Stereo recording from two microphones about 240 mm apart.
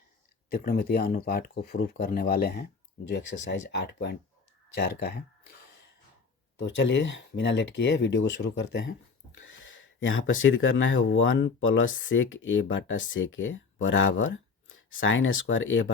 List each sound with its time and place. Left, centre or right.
0.5 s speech: left
6.6 s speech: left